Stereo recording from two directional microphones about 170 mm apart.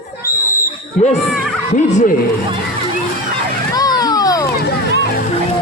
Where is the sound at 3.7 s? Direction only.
20° left (ahead or behind).